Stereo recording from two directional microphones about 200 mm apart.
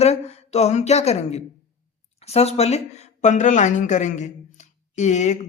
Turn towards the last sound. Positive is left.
turn(degrees=35)  # may be behind; listen again after turning